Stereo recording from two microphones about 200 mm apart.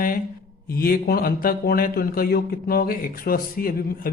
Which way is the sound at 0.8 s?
50° left (ahead or behind).